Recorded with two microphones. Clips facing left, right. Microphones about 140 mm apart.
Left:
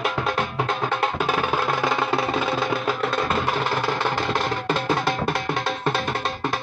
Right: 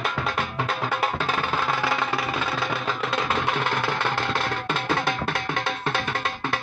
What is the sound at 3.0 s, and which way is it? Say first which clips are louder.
Music: left 2 dB; centre (ahead or behind).